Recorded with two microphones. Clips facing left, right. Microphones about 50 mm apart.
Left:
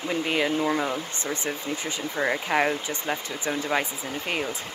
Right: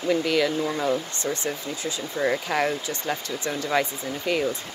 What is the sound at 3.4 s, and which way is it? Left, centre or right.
Speech, centre.